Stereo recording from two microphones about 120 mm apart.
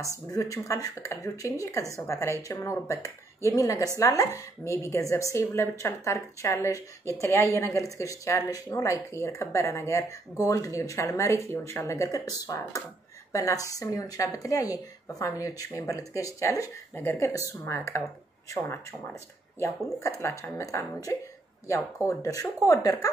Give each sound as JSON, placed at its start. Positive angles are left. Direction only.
{"t": 0.3, "sound": "speech", "side_deg": 25}